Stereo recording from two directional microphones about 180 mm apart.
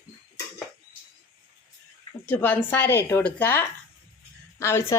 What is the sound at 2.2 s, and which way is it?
Speech, 10° left (ahead or behind).